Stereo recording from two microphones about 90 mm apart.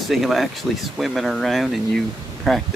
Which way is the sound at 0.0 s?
Centre (ahead or behind).